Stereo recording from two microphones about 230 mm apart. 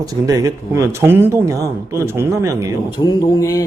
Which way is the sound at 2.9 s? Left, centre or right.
Centre.